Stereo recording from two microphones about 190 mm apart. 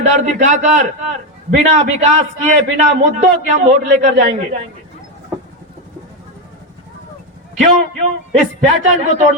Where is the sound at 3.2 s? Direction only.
40° right (ahead or behind).